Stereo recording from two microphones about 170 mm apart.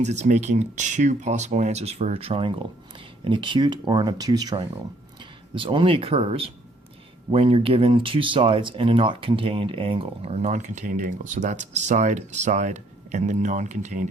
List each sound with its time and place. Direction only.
0.0 s speech: 45° right (ahead or behind)